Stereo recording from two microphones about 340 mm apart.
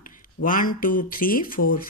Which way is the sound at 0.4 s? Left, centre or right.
Left.